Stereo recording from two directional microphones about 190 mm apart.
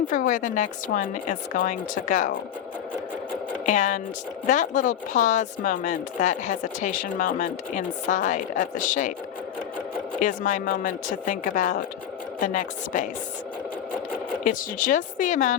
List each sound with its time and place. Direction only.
0.1 s speech: 45° left (ahead or behind)
3.7 s a woman's voice: 40° left (ahead or behind)
10.2 s speech: 45° left (ahead or behind)
14.4 s speech: 45° left (ahead or behind)